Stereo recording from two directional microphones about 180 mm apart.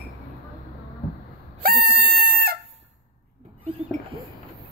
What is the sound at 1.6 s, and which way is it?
Chicken, 60° right (ahead or behind).